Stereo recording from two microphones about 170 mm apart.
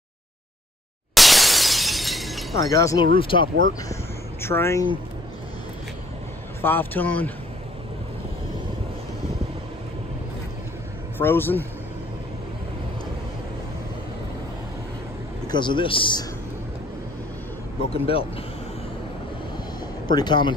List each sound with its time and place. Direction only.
1.1 s shatter: centre (ahead or behind)
2.6 s a man's voice: 20° left (ahead or behind)
3.2 s speech: 30° left (ahead or behind)
3.9 s a sound: 15° left (ahead or behind)
6.6 s speech: 10° left (ahead or behind)
11.1 s speech: 15° left (ahead or behind)
15.4 s a man's voice: 25° left (ahead or behind)
17.9 s speech: 35° left (ahead or behind)
20.1 s a man's voice: 25° left (ahead or behind)